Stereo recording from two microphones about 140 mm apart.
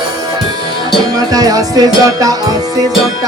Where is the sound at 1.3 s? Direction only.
25° right (ahead or behind).